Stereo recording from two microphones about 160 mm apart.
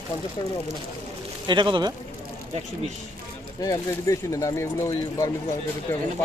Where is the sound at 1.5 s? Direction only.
30° right (ahead or behind).